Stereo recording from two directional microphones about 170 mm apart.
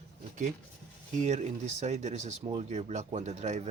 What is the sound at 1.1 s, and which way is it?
Speech, 40° right (ahead or behind).